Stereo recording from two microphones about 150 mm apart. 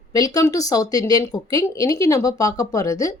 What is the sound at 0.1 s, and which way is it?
Speech, 20° left (ahead or behind).